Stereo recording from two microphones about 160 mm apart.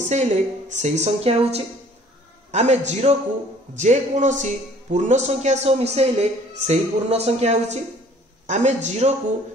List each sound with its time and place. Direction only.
0.0 s a man's voice: 45° right (ahead or behind)